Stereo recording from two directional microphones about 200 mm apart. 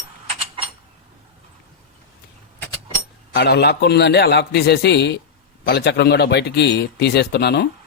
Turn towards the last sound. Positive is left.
turn(degrees=55)  # may be behind; listen again after turning